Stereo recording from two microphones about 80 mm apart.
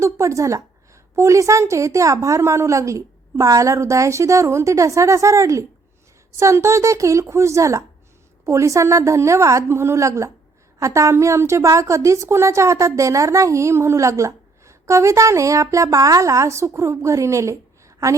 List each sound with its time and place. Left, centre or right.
0.0 s a woman's voice: right